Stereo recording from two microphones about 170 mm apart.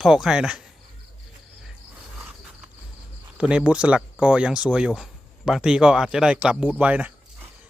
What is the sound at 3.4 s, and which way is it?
Speech, 5° right (ahead or behind).